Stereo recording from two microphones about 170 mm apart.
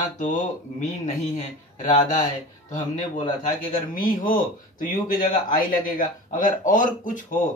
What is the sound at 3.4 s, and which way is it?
Speech, 55° left (ahead or behind).